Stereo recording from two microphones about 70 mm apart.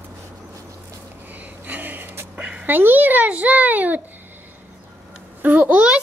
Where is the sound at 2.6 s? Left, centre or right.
Right.